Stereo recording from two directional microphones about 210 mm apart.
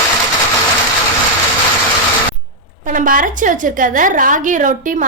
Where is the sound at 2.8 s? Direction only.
40° right (ahead or behind).